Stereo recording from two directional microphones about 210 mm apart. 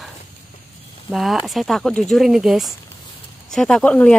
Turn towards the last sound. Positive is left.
turn(degrees=5)  # may be behind; listen again after turning